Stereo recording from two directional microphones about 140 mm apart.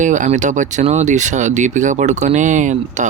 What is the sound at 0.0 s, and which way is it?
Speech, 65° right (ahead or behind).